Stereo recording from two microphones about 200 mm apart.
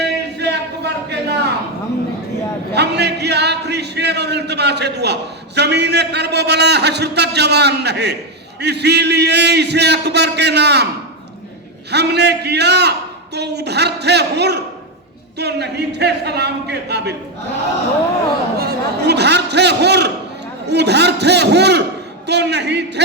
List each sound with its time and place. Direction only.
0.0 s a sound: 55° right (ahead or behind)
2.7 s a man's voice: 55° right (ahead or behind)
11.9 s a man's voice: 55° right (ahead or behind)
18.5 s a man's voice: 55° right (ahead or behind)